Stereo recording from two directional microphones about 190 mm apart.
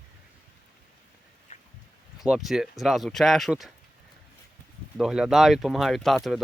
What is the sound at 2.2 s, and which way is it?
Speech, centre (ahead or behind).